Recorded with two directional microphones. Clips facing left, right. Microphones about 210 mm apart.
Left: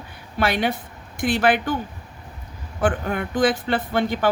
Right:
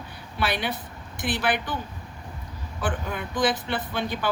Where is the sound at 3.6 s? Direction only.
50° left (ahead or behind).